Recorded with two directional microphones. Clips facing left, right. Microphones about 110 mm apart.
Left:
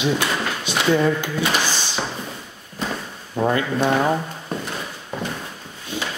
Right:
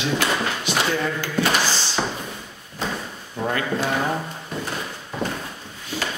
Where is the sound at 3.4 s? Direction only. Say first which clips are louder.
Left 4 dB; 25° left (ahead or behind).